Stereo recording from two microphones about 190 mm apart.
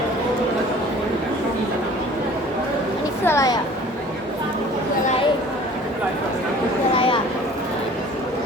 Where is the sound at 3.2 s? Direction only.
15° left (ahead or behind).